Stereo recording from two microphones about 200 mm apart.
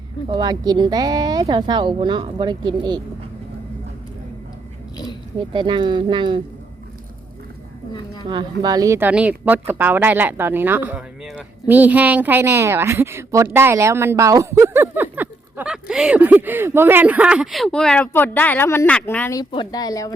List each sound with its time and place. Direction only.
0.3 s speech: 20° right (ahead or behind)
5.5 s speech: 25° right (ahead or behind)
8.6 s speech: 20° right (ahead or behind); by 20.1 s 20° left (ahead or behind)